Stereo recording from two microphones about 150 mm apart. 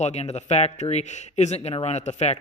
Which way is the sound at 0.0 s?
50° left (ahead or behind).